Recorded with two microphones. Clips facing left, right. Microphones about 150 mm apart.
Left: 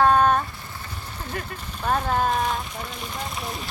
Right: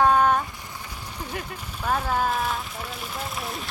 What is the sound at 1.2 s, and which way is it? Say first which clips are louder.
Speech: left 1 dB; 10° right (ahead or behind).